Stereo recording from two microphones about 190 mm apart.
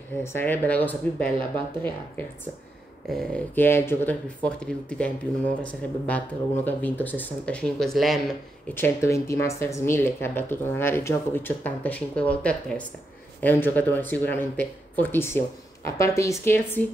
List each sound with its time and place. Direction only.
0.2 s speech: 10° left (ahead or behind)
3.1 s speech: 5° left (ahead or behind)
8.7 s speech: 15° left (ahead or behind)